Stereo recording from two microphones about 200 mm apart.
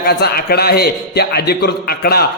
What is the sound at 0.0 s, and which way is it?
A man's voice, 50° left (ahead or behind).